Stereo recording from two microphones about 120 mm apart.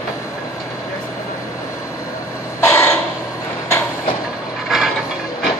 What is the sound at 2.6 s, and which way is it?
Crow, 20° left (ahead or behind).